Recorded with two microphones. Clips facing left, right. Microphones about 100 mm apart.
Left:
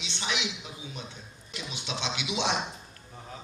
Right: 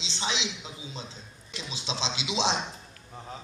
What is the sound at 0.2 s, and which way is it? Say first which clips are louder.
Mantra: right 1 dB; 25° right (ahead or behind).